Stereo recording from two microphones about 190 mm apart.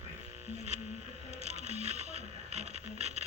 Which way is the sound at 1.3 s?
35° right (ahead or behind).